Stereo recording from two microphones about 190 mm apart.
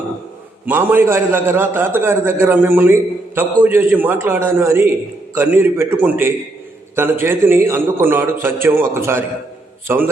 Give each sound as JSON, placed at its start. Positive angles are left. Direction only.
{"t": 0.6, "sound": "a man's voice", "side_deg": -10}